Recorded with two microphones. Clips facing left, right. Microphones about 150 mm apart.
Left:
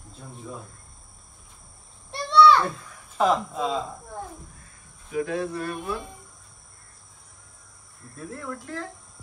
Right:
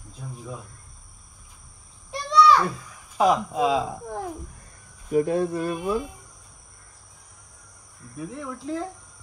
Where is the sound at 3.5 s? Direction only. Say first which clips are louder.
Right 5 dB; 80° right.